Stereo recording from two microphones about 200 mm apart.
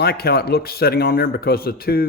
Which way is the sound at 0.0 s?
50° left (ahead or behind).